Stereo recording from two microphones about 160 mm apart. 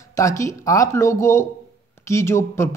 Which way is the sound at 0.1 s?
20° left (ahead or behind).